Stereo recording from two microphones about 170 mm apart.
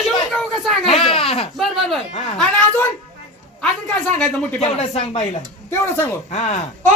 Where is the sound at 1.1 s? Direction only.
35° left (ahead or behind).